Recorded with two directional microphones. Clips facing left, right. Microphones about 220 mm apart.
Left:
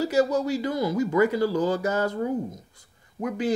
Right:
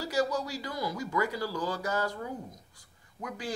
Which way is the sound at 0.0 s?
25° left (ahead or behind).